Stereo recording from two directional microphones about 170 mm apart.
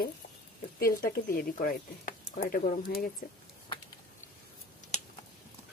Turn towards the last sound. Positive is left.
turn(degrees=40)  # may be behind; listen again after turning